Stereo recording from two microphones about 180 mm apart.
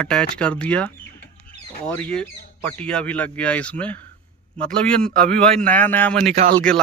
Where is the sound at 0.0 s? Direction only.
5° left (ahead or behind).